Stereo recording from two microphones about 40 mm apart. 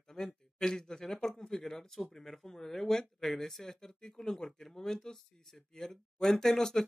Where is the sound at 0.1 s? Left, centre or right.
Centre.